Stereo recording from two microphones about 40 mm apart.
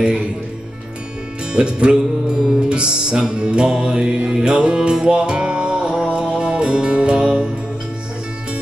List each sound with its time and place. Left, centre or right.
1.5 s music: right